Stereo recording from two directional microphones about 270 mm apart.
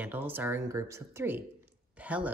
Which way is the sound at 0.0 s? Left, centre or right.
Centre.